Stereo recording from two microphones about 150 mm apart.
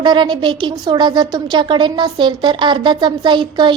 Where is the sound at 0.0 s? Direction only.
30° right (ahead or behind).